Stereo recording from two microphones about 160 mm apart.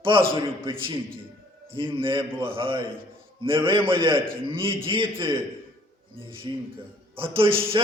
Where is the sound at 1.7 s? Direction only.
30° right (ahead or behind).